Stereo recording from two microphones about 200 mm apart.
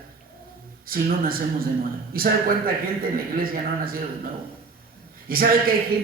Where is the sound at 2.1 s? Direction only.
45° right (ahead or behind).